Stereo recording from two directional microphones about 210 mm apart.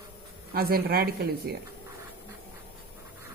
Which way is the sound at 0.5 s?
45° right (ahead or behind).